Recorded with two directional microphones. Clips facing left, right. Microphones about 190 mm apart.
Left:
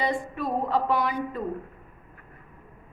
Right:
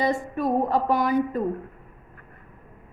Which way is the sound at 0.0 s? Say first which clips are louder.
Right 4 dB; 45° right (ahead or behind).